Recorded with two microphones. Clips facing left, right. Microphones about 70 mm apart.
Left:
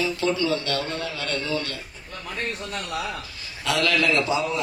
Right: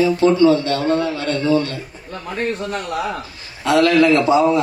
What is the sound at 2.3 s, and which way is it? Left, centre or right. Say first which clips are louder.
Speech: right 8 dB; right.